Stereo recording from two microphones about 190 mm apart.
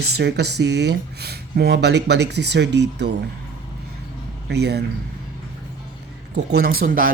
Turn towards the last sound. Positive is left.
turn(degrees=-50)  # may be behind; listen again after turning